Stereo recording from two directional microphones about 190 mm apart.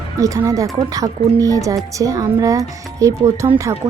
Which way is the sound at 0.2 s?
15° right (ahead or behind).